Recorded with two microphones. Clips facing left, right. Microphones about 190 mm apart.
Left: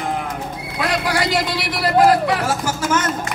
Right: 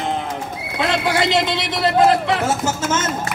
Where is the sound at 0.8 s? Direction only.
25° right (ahead or behind).